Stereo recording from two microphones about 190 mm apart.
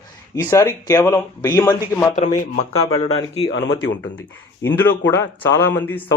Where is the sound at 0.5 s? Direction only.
15° left (ahead or behind).